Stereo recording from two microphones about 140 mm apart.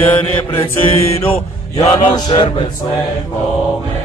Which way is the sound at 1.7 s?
30° left (ahead or behind).